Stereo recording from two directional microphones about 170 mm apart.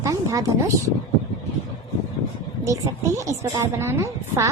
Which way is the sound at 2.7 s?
20° right (ahead or behind).